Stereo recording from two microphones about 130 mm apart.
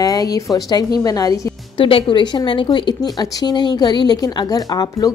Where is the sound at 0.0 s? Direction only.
30° left (ahead or behind).